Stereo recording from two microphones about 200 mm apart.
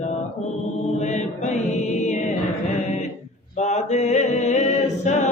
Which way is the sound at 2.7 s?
35° left (ahead or behind).